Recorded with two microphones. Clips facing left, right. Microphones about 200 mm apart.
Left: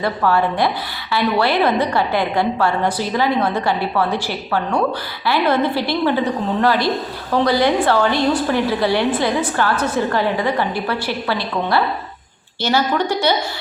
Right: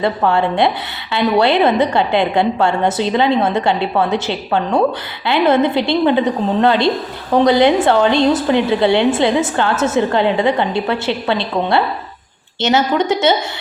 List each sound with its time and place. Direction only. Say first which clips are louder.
0.0 s a woman's voice: right 2 dB; 25° right (ahead or behind)